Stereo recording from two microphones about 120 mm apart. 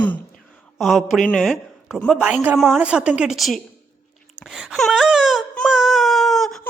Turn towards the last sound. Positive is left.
turn(degrees=0)  # may be behind; listen again after turning